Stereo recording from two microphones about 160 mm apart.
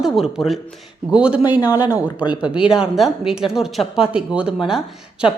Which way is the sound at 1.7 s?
25° left (ahead or behind).